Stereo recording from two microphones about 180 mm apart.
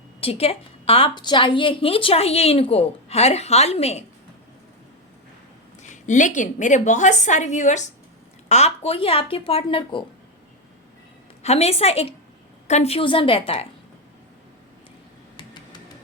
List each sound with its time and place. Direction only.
0.2 s a woman's voice: 30° left (ahead or behind)
5.9 s a woman's voice: 45° left (ahead or behind); by 10.0 s 30° left (ahead or behind)
11.4 s a woman's voice: 35° left (ahead or behind)